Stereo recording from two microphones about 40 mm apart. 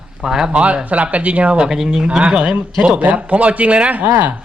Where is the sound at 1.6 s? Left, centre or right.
Centre.